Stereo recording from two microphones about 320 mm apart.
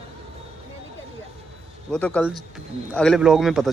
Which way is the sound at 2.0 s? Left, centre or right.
Centre.